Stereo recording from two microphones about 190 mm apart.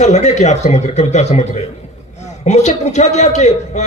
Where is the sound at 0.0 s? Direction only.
35° left (ahead or behind).